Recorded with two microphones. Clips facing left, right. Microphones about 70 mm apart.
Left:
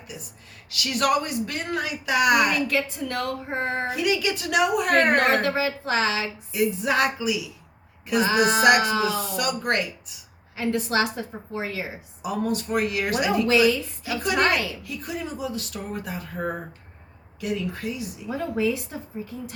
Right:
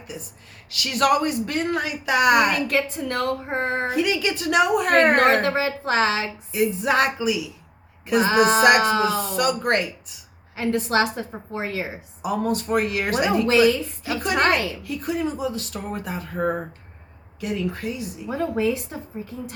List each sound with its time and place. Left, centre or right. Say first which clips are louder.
0.7 s speech: right 3 dB; right
17.9 s speech: right 2 dB; right